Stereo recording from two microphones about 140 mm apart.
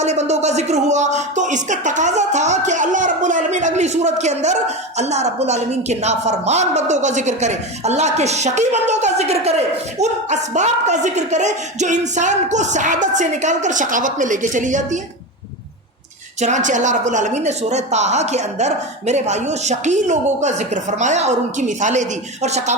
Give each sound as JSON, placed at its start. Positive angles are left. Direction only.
{"t": 0.0, "sound": "a woman's voice", "side_deg": -55}
{"t": 16.4, "sound": "a woman's voice", "side_deg": -60}